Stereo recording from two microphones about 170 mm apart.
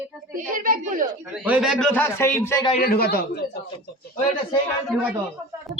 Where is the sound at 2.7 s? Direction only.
60° left (ahead or behind).